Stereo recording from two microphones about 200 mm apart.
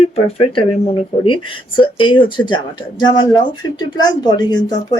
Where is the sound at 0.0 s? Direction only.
30° left (ahead or behind).